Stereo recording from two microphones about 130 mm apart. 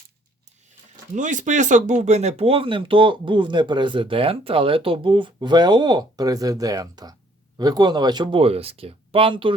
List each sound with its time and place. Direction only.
1.1 s speech: 75° right (ahead or behind); by 9.6 s 40° right (ahead or behind)